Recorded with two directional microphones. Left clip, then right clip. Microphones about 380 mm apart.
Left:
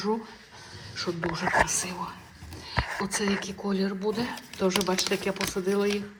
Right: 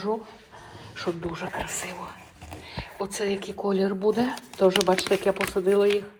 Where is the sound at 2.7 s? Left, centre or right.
Centre.